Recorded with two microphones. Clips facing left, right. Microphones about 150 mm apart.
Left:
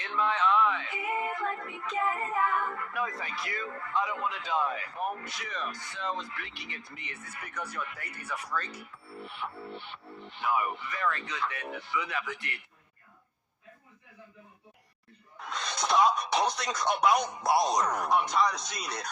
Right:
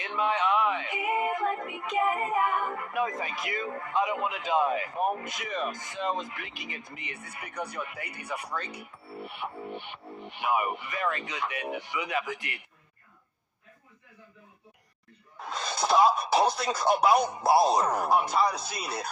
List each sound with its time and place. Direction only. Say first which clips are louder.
0.0 s music: right 1 dB; 15° right (ahead or behind)
4.9 s speech: right 5 dB; 20° right (ahead or behind)
6.2 s music: right 2 dB; 15° right (ahead or behind)
15.4 s speech: right 3 dB; 5° right (ahead or behind)
17.4 s speech: right 4 dB; 30° right (ahead or behind)
18.0 s music: right 2 dB; 5° right (ahead or behind)